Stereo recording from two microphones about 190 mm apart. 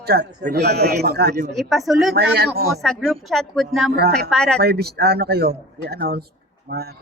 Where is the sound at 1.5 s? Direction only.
Centre (ahead or behind).